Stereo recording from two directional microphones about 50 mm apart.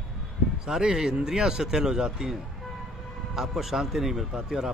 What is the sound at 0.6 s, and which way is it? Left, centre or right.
A man's voice, centre.